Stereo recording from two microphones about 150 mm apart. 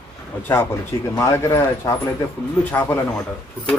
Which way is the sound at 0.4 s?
15° left (ahead or behind).